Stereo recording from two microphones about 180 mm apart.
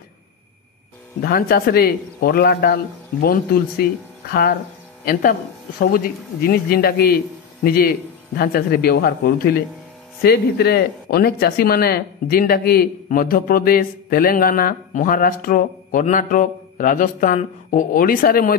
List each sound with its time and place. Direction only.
1.2 s a man's voice: 55° left (ahead or behind)
5.8 s a man's voice: 55° left (ahead or behind)